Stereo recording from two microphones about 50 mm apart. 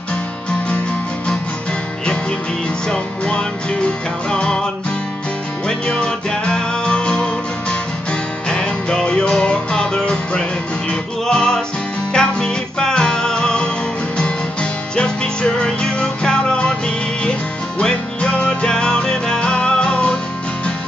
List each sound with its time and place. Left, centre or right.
0.7 s music: left
2.9 s music: centre
5.7 s music: centre